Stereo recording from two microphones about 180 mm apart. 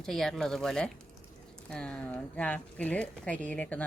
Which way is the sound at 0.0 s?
5° left (ahead or behind).